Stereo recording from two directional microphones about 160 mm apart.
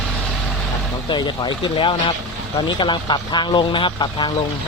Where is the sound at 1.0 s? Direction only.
30° left (ahead or behind).